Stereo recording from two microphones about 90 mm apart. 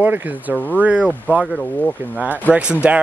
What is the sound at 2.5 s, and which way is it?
Speech, 20° left (ahead or behind).